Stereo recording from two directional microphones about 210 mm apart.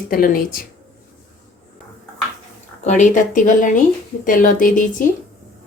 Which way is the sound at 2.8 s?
35° left (ahead or behind).